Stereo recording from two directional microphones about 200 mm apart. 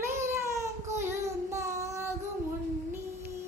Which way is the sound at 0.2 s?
15° right (ahead or behind).